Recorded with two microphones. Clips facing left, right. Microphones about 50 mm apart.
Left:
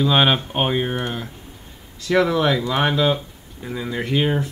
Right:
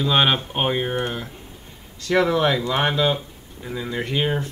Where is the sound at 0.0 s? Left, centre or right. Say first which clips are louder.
Left 2 dB; centre.